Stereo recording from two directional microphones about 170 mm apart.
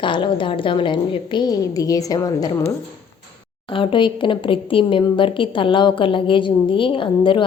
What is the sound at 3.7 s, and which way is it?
A woman's voice, 30° left (ahead or behind).